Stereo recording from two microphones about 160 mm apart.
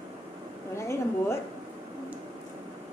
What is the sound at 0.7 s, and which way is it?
Speech, 15° left (ahead or behind).